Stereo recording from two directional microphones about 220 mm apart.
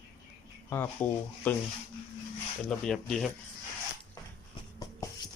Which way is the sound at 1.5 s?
5° left (ahead or behind).